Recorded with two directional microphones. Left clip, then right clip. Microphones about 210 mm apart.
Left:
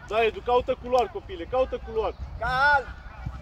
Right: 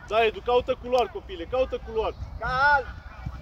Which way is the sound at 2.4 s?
55° left (ahead or behind).